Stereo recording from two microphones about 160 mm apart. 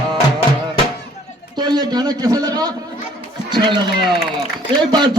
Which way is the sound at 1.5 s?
25° right (ahead or behind).